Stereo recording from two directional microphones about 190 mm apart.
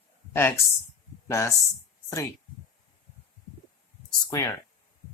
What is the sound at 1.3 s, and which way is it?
Speech, 15° left (ahead or behind).